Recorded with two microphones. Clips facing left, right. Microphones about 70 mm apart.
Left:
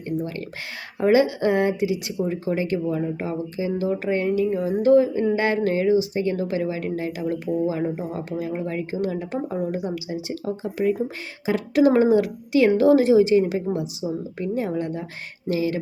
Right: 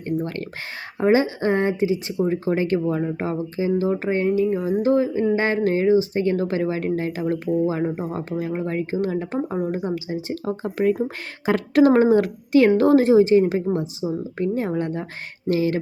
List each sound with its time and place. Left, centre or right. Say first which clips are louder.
0.2 s speech: right 2 dB; right
0.9 s speech: even; right